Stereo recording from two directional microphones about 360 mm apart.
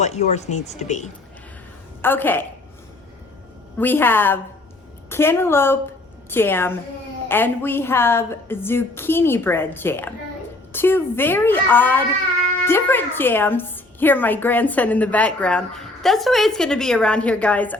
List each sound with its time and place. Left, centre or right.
0.0 s speech: centre
2.0 s a woman's voice: centre
3.8 s a woman's voice: centre